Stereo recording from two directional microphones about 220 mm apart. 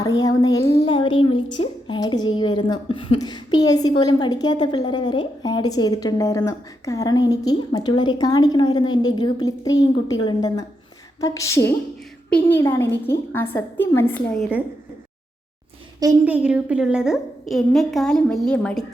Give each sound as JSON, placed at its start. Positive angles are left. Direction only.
{"t": 0.0, "sound": "a child's voice", "side_deg": 15}
{"t": 0.8, "sound": "a sound", "side_deg": 20}
{"t": 1.6, "sound": "a woman's voice", "side_deg": 20}
{"t": 16.0, "sound": "a woman's voice", "side_deg": -10}